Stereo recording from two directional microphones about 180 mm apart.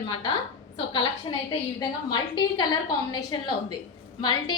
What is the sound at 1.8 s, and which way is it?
A woman's voice, 25° left (ahead or behind).